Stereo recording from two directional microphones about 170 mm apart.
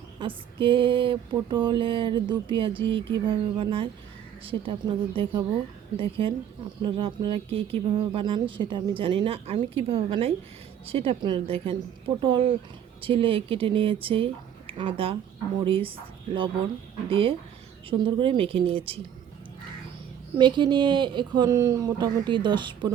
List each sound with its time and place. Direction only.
0.2 s mantra: 30° right (ahead or behind)
4.4 s speech: 30° right (ahead or behind)
17.1 s speech: 30° right (ahead or behind)
20.4 s mantra: 30° right (ahead or behind)